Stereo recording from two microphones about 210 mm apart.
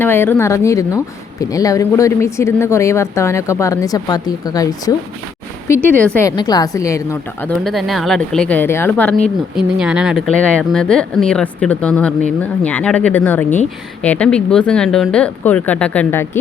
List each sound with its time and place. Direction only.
0.0 s speech: 10° left (ahead or behind)
7.6 s speech: centre (ahead or behind)
9.6 s speech: 5° right (ahead or behind)